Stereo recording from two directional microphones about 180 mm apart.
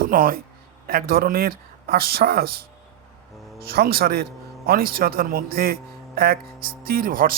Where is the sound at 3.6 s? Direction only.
60° right (ahead or behind).